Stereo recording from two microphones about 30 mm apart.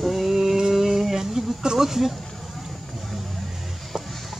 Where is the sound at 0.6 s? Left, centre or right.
Centre.